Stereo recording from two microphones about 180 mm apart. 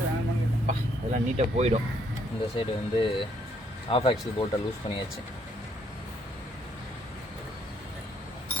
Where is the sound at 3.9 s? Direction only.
30° left (ahead or behind).